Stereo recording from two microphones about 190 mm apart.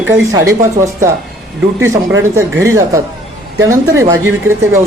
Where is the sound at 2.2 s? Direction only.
15° right (ahead or behind).